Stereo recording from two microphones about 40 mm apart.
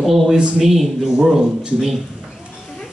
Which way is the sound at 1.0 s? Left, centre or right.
Centre.